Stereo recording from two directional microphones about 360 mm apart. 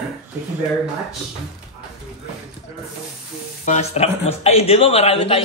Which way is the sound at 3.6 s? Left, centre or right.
Centre.